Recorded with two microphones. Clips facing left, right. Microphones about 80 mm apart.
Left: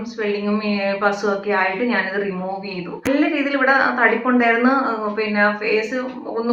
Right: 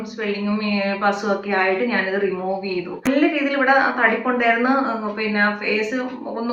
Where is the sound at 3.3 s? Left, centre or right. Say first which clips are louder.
Even; centre.